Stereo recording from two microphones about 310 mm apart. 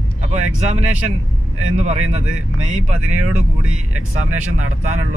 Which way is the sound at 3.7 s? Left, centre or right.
Right.